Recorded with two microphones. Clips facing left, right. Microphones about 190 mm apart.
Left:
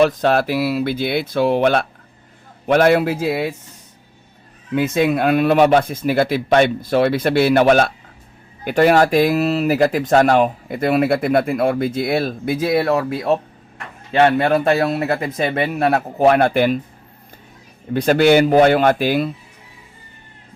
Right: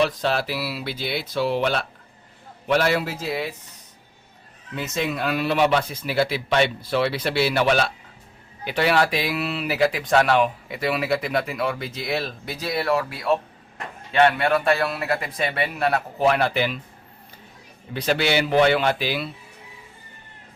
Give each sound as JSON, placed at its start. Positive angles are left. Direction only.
{"t": 0.0, "sound": "speech", "side_deg": 50}
{"t": 4.7, "sound": "speech", "side_deg": 55}
{"t": 14.4, "sound": "speech", "side_deg": 40}
{"t": 15.4, "sound": "speech", "side_deg": 45}
{"t": 17.9, "sound": "speech", "side_deg": 45}